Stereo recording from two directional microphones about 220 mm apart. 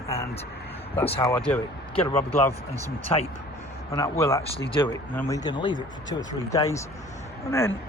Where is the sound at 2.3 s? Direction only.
10° left (ahead or behind).